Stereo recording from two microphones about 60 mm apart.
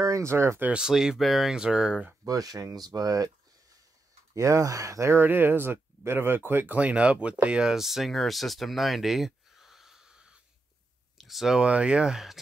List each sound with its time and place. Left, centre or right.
0.0 s speech: right
0.7 s speech: centre
2.2 s speech: right
4.3 s speech: right
5.1 s speech: right; by 11.6 s centre
11.6 s speech: centre